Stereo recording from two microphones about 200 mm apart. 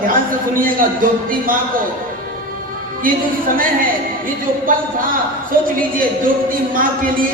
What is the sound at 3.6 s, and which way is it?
Speech, 45° right (ahead or behind).